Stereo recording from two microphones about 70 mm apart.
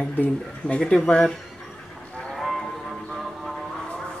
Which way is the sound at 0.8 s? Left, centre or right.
Centre.